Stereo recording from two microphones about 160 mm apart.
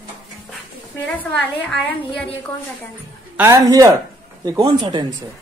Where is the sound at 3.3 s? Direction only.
20° right (ahead or behind).